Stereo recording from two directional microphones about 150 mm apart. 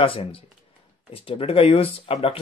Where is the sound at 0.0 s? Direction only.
35° left (ahead or behind).